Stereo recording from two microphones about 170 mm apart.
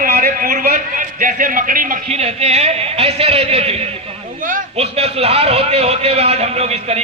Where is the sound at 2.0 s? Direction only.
35° right (ahead or behind).